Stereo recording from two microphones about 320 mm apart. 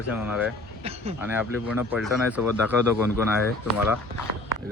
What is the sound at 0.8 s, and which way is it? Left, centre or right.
Speech, centre.